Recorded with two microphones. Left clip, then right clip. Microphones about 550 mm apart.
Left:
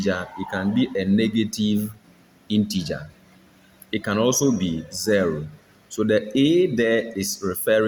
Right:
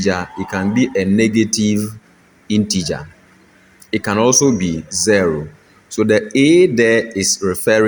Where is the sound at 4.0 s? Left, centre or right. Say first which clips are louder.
Right 7 dB; left.